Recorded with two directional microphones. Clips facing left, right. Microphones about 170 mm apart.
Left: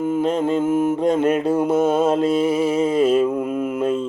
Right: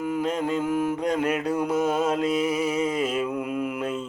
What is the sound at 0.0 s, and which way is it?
Mantra, 25° left (ahead or behind).